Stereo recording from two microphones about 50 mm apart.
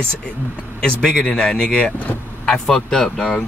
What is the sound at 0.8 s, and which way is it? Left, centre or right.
Speech, centre.